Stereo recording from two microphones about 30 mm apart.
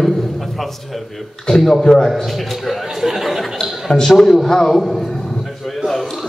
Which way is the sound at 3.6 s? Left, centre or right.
Centre.